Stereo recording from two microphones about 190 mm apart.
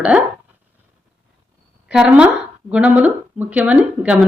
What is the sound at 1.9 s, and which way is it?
Speech, 5° right (ahead or behind).